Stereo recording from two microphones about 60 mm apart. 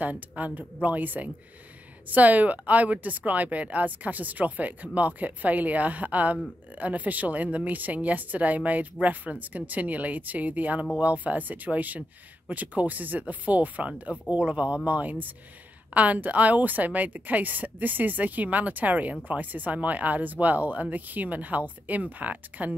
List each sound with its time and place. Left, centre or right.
0.0 s speech: right